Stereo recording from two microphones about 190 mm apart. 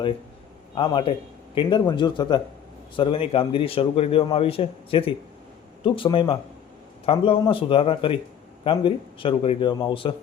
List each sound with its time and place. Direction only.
0.8 s a man's voice: 25° left (ahead or behind)